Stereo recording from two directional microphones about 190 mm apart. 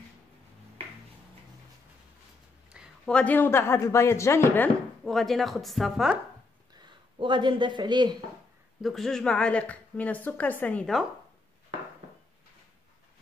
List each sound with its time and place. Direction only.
2.7 s a woman's voice: centre (ahead or behind)
5.0 s a woman's voice: centre (ahead or behind)
7.2 s speech: 25° right (ahead or behind)
8.8 s a woman's voice: centre (ahead or behind)